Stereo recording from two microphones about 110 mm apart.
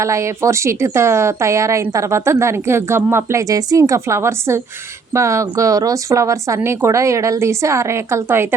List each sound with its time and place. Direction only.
0.0 s a woman's voice: 25° right (ahead or behind)